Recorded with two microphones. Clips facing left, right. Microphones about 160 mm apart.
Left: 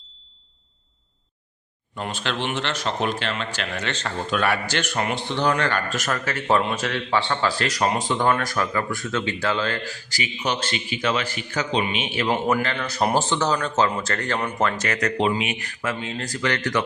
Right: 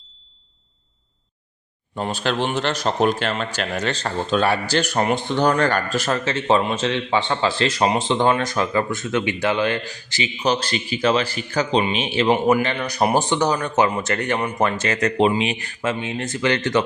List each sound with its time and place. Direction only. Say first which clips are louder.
2.0 s speech: right 5 dB; 35° right (ahead or behind); by 10.2 s 20° right (ahead or behind)
10.4 s speech: right 5 dB; 35° right (ahead or behind)
12.3 s speech: right 5 dB; 15° right (ahead or behind)
14.8 s speech: right 4 dB; 30° right (ahead or behind)